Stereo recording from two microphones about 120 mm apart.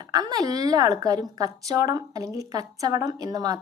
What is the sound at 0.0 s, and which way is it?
A woman's voice, 35° right (ahead or behind).